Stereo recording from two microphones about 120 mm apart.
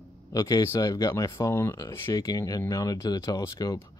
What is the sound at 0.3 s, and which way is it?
Speech, 30° left (ahead or behind).